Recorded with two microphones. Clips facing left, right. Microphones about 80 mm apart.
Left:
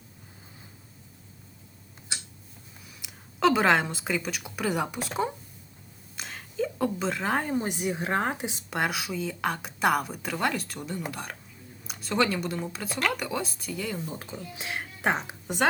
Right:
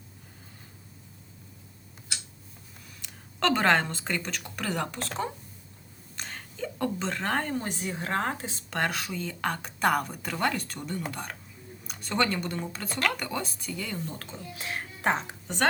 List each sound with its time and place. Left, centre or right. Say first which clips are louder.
2.1 s tick-tock: left 2 dB; left
3.0 s a woman's voice: left 4 dB; centre
14.1 s speech: left 2 dB; centre